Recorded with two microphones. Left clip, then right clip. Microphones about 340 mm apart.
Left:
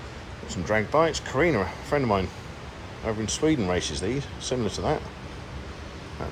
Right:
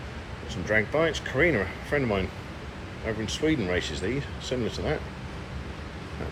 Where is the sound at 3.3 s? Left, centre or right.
Centre.